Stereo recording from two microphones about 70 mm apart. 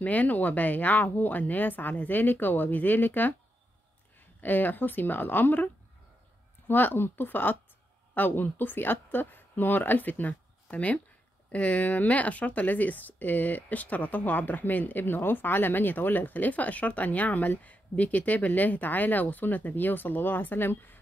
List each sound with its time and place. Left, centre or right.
0.0 s speech: left
4.4 s speech: left
6.7 s speech: left